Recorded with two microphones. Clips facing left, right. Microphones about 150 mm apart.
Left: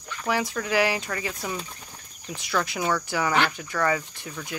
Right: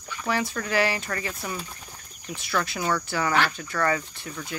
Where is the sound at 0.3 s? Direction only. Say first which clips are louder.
Left 1 dB; 15° left (ahead or behind).